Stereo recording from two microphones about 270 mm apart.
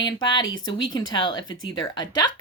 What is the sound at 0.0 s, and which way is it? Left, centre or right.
Speech, centre.